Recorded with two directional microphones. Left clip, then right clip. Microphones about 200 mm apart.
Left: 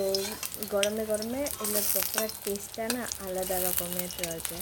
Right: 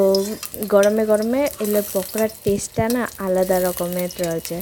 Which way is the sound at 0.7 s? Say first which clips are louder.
Right 13 dB; 35° right (ahead or behind).